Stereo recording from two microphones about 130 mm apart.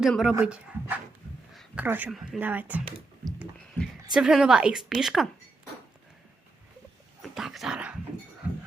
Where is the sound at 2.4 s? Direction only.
15° right (ahead or behind).